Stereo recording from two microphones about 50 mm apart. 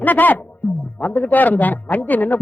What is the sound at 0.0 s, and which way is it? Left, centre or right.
Speech, left.